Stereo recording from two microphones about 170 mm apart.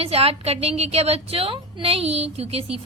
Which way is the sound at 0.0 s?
35° right (ahead or behind).